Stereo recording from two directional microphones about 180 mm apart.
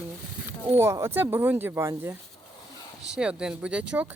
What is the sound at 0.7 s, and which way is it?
Speech, 15° right (ahead or behind).